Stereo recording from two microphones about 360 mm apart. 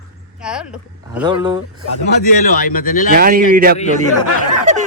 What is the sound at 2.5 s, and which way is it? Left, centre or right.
Speech, left.